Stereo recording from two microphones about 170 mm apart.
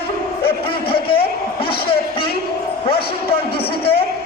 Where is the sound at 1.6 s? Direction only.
65° left (ahead or behind).